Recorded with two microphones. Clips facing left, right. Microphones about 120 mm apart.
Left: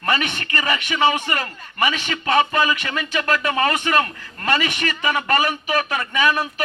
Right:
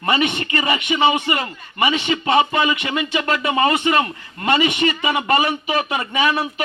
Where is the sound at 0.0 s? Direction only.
5° right (ahead or behind).